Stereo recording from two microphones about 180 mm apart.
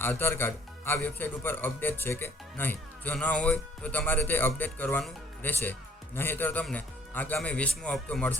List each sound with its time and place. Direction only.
0.0 s speech: 10° left (ahead or behind)